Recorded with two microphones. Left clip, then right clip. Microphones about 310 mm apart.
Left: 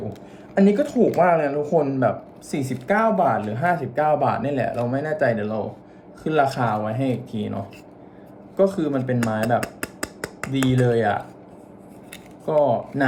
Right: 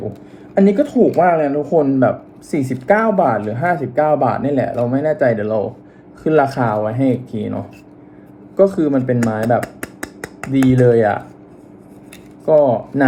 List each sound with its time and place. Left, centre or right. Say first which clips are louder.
0.5 s a woman's voice: right 5 dB; centre
2.8 s speech: right 5 dB; centre
12.5 s speech: right 7 dB; centre